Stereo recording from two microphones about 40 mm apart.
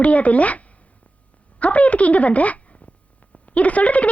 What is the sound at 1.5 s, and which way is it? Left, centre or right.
A woman's voice, left.